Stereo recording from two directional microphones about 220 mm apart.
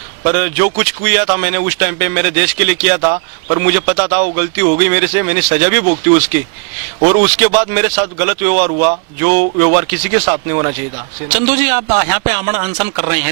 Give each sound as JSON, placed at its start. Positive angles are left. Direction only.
{"t": 0.3, "sound": "speech", "side_deg": -15}
{"t": 7.2, "sound": "speech", "side_deg": -15}
{"t": 8.5, "sound": "speech", "side_deg": -40}
{"t": 9.2, "sound": "speech", "side_deg": -15}